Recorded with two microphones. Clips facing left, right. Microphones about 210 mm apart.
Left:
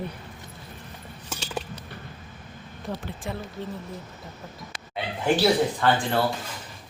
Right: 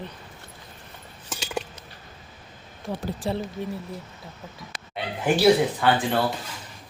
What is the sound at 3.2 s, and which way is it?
Speech, 35° right (ahead or behind).